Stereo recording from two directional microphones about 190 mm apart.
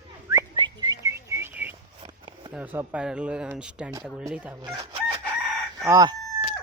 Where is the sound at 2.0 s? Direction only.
25° right (ahead or behind).